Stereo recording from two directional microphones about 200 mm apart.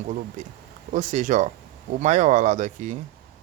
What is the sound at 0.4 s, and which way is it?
Speech, 40° right (ahead or behind).